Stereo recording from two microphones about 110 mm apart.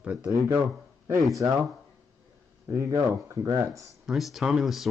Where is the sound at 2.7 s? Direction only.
30° right (ahead or behind).